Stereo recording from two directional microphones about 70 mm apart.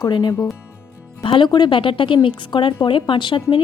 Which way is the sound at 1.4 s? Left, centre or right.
Left.